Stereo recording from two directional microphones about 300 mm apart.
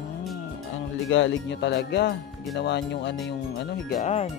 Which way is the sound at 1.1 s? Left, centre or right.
Left.